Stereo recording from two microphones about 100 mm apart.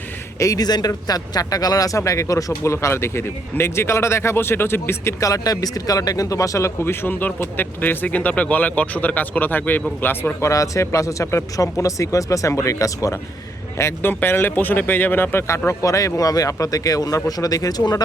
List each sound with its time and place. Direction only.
0.3 s speech: 35° left (ahead or behind)
10.5 s speech: 30° left (ahead or behind)